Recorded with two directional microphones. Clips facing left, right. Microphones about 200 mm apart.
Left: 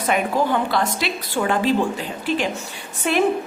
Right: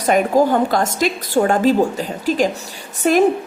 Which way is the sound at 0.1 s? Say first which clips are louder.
Right 6 dB; 40° right (ahead or behind).